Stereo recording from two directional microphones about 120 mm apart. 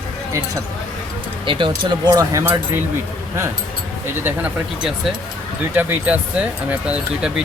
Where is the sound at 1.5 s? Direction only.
45° right (ahead or behind).